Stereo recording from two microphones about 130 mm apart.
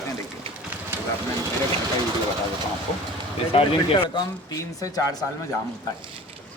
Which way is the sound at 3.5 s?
45° left (ahead or behind).